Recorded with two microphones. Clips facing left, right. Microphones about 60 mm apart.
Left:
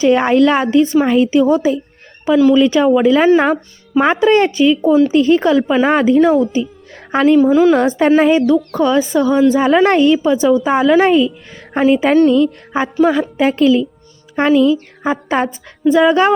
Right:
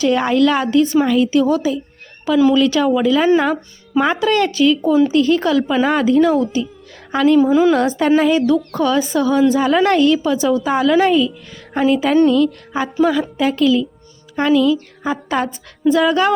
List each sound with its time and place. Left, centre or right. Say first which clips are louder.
0.0 s a woman's voice: left 3 dB; left
7.3 s a woman's voice: left 2 dB; centre
7.7 s speech: left 3 dB; left
8.4 s a woman's voice: left 3 dB; centre; by 15.4 s left
15.8 s speech: left 3 dB; centre